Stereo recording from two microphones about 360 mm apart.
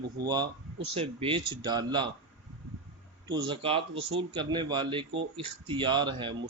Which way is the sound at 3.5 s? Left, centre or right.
Centre.